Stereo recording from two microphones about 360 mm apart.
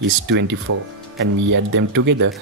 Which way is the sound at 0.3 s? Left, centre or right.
Right.